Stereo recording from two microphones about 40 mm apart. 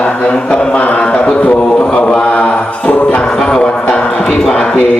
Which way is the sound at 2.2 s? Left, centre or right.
Left.